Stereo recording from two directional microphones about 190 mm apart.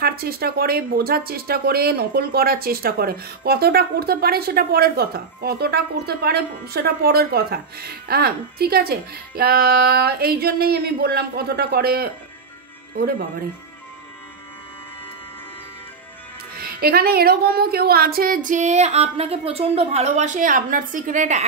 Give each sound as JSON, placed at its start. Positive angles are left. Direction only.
{"t": 0.0, "sound": "speech", "side_deg": -55}
{"t": 16.5, "sound": "speech", "side_deg": -50}